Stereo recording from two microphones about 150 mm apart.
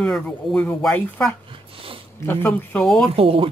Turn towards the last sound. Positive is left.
turn(degrees=-40)  # may be behind; listen again after turning